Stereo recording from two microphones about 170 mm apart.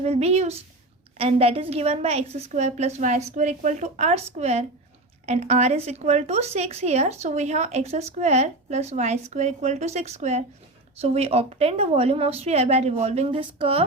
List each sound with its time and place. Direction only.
0.0 s a woman's voice: 40° right (ahead or behind)